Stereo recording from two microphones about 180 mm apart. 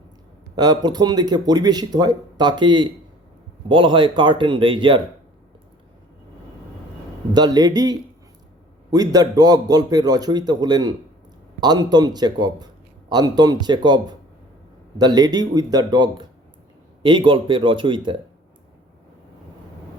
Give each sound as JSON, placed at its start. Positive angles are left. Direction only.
{"t": 0.5, "sound": "a man's voice", "side_deg": -20}
{"t": 7.3, "sound": "a man's voice", "side_deg": -20}